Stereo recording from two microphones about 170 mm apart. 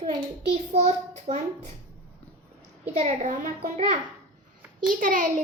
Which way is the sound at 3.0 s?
40° right (ahead or behind).